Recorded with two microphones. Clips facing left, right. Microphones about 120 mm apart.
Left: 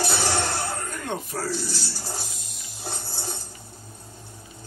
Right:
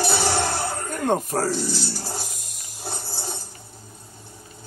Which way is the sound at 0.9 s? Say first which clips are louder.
Right 8 dB; 45° right (ahead or behind).